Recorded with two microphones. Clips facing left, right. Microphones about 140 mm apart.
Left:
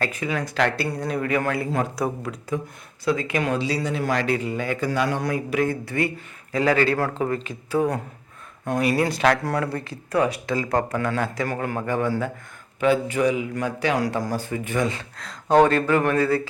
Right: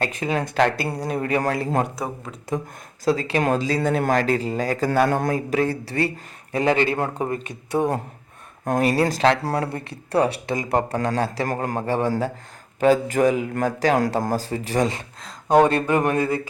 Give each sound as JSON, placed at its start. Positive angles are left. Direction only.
{"t": 0.0, "sound": "a man's voice", "side_deg": -25}
{"t": 4.9, "sound": "speech", "side_deg": -50}
{"t": 6.6, "sound": "a man's voice", "side_deg": -20}
{"t": 8.6, "sound": "a man's voice", "side_deg": -40}
{"t": 10.9, "sound": "a man's voice", "side_deg": -35}
{"t": 14.5, "sound": "speech", "side_deg": -35}
{"t": 15.4, "sound": "a man's voice", "side_deg": -15}